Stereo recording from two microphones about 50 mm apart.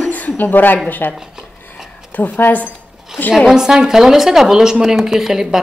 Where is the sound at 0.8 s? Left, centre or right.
Left.